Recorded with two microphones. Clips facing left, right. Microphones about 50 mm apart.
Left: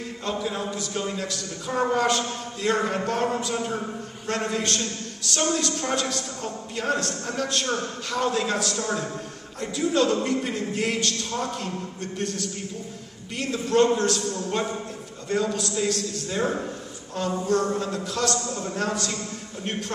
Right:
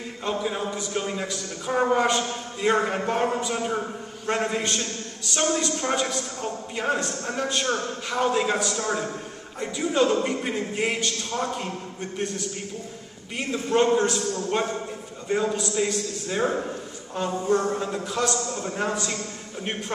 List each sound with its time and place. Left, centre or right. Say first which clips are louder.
0.2 s a man's voice: right 2 dB; centre